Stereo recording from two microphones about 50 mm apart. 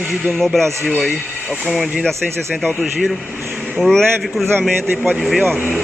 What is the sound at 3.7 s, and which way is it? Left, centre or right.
A man's voice, centre.